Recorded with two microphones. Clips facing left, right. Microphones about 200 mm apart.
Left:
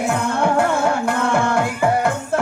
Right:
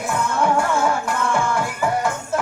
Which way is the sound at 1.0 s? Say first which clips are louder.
Left 3 dB; 60° left (ahead or behind).